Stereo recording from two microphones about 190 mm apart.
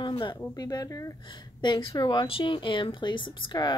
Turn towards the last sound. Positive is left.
turn(degrees=25)  # may be behind; listen again after turning